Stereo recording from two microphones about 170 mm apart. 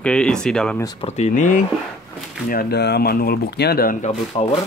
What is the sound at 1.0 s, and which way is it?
Speech, 40° left (ahead or behind).